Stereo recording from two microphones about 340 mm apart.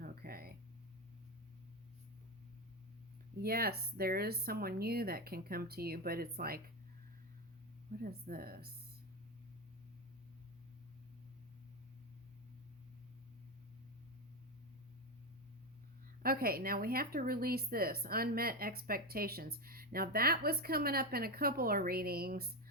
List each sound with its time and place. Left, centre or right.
0.0 s a sound: right
3.4 s speech: right
8.0 s speech: right
16.2 s speech: right